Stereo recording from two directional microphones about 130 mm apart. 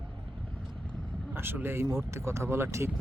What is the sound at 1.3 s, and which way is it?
Speech, 15° right (ahead or behind).